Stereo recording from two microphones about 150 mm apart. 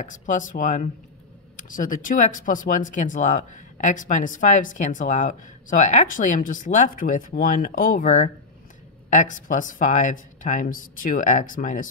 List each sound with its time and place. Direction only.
0.0 s speech: 60° left (ahead or behind)